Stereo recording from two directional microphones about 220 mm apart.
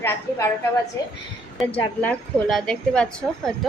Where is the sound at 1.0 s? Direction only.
15° left (ahead or behind).